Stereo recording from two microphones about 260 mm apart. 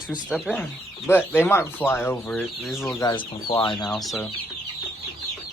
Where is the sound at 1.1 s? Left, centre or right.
Centre.